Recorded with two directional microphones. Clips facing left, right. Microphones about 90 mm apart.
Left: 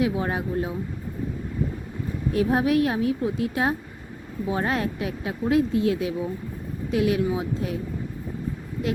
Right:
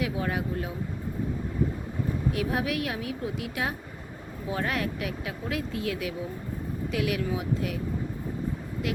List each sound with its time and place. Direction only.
0.0 s speech: 30° left (ahead or behind)
2.3 s a woman's voice: 35° left (ahead or behind)